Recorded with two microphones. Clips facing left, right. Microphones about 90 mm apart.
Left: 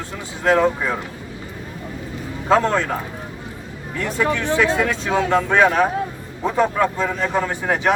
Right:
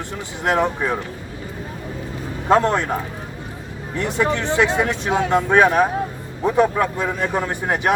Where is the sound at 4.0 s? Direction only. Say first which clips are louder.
Right 1 dB; 20° right (ahead or behind).